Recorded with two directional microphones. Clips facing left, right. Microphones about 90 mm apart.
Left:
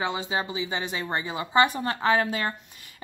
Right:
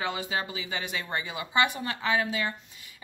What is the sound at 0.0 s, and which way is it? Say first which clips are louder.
Speech: left 3 dB; 25° left (ahead or behind).